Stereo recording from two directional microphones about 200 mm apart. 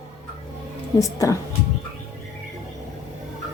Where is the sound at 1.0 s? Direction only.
15° left (ahead or behind).